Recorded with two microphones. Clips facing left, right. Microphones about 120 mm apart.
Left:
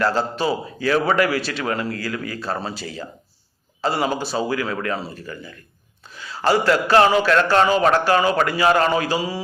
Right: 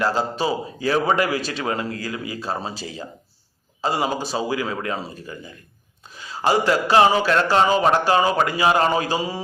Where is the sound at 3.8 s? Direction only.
15° right (ahead or behind).